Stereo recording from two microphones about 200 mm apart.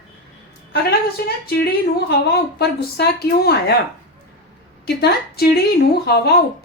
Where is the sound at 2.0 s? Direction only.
55° left (ahead or behind).